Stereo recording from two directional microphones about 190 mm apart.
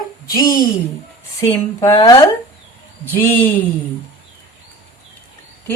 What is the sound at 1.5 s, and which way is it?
Speech, 15° left (ahead or behind).